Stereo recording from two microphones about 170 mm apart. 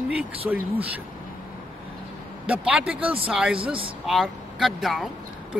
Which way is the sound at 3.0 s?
35° right (ahead or behind).